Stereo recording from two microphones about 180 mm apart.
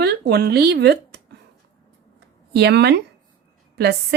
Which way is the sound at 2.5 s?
65° right (ahead or behind).